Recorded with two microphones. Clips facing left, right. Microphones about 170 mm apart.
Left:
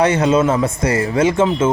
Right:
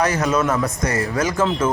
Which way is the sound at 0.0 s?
30° left (ahead or behind).